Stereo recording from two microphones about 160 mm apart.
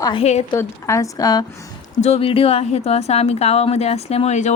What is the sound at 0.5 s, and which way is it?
Speech, 20° left (ahead or behind).